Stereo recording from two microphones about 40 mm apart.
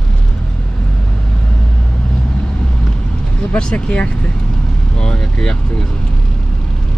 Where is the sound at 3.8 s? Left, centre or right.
Left.